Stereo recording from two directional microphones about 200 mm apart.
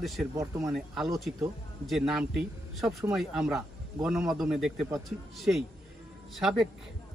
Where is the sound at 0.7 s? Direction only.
Centre (ahead or behind).